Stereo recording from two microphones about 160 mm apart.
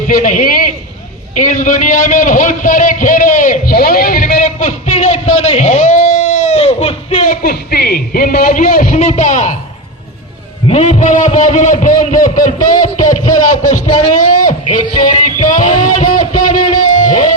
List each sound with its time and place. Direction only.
0.1 s a man's voice: 55° left (ahead or behind)
10.7 s a man's voice: 40° left (ahead or behind)
14.2 s a sound: 55° left (ahead or behind)
15.4 s music: 55° left (ahead or behind)